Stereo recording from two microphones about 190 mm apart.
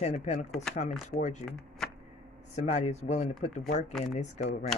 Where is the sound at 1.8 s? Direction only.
5° left (ahead or behind).